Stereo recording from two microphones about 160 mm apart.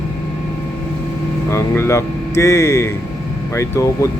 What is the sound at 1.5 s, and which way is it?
Speech, 15° left (ahead or behind).